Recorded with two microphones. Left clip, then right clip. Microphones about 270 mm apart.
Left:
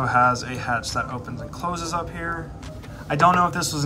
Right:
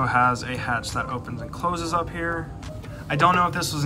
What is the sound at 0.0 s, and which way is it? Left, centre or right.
Speech, centre.